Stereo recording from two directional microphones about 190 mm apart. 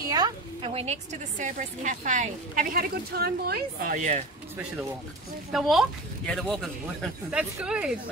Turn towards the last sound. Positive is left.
turn(degrees=-5)  # may be behind; listen again after turning